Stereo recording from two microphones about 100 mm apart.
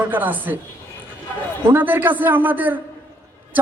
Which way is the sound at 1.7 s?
20° right (ahead or behind).